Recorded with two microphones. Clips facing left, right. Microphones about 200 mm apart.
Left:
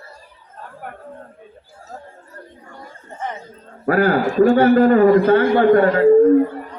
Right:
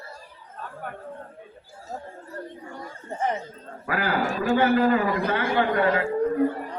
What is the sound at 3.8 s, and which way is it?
A man's voice, 45° left (ahead or behind).